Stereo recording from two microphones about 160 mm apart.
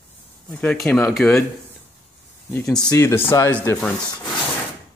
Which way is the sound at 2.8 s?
20° left (ahead or behind).